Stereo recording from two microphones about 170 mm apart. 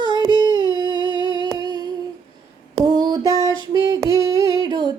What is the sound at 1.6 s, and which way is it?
Humming, 20° right (ahead or behind).